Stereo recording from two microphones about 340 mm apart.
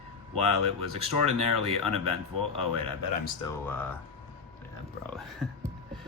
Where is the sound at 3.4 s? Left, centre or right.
Centre.